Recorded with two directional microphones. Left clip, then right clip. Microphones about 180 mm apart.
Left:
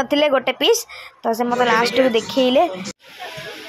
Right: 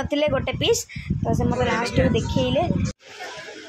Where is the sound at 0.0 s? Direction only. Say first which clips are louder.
Left 6 dB; 10° left (ahead or behind).